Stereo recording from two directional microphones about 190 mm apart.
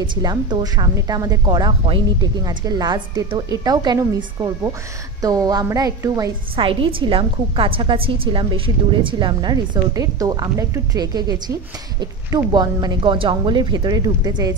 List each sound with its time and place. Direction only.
0.0 s a woman's voice: 25° right (ahead or behind)
5.2 s a woman's voice: 20° right (ahead or behind)